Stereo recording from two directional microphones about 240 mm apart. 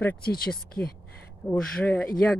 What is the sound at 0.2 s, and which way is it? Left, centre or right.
Speech, left.